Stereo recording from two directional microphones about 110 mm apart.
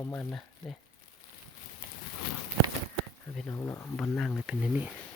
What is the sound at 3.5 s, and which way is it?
Speech, 25° left (ahead or behind).